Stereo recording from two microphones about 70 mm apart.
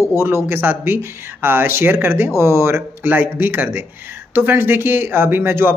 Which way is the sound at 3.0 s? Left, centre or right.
Right.